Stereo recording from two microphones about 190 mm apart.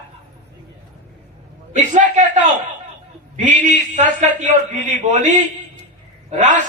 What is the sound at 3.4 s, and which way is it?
A man's voice, 40° right (ahead or behind).